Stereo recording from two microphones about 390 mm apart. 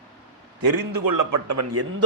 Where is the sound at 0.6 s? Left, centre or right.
Right.